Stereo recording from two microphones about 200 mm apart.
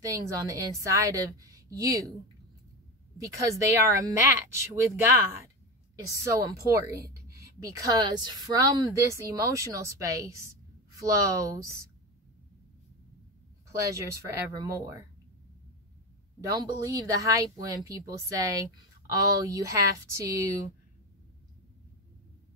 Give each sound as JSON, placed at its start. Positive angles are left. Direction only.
{"t": 0.0, "sound": "speech", "side_deg": -15}
{"t": 3.2, "sound": "speech", "side_deg": -15}
{"t": 6.2, "sound": "speech", "side_deg": -15}
{"t": 13.7, "sound": "speech", "side_deg": -15}
{"t": 16.3, "sound": "speech", "side_deg": -20}